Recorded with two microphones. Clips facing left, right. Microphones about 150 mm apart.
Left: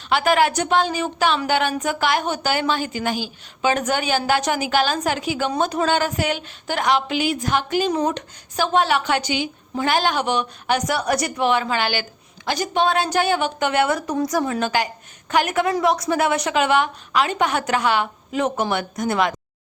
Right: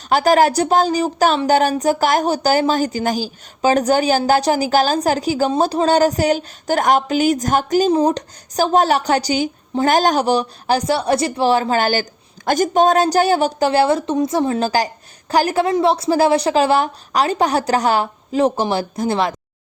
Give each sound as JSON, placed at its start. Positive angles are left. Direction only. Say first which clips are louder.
{"t": 0.1, "sound": "speech", "louder": "right 4 dB", "side_deg": -40}